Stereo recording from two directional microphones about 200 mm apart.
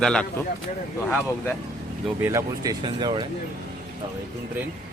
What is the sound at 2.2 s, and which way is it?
Speech, 15° right (ahead or behind).